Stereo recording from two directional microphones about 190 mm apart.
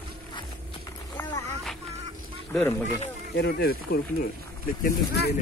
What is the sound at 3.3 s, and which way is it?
Speech, 60° left (ahead or behind).